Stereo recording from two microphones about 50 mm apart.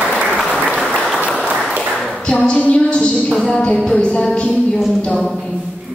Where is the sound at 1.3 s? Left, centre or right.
Centre.